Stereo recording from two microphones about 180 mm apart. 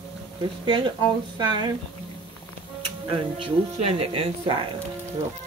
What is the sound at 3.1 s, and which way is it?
Speech, 30° right (ahead or behind).